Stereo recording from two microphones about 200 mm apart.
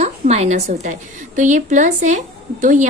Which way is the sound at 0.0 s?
30° right (ahead or behind).